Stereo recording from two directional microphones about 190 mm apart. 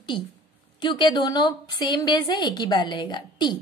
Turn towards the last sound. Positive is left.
turn(degrees=25)  # may be behind; listen again after turning